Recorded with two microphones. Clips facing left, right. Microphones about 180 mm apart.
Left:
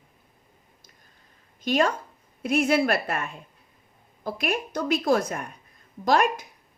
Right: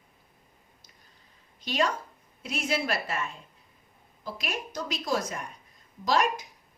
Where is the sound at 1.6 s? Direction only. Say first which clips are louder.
Left 5 dB; 50° left (ahead or behind).